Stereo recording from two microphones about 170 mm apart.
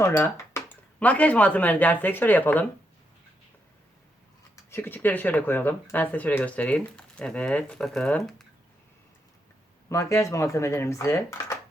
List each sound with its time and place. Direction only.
0.0 s speech: 15° left (ahead or behind)
4.5 s speech: 15° left (ahead or behind)
9.9 s speech: 15° left (ahead or behind)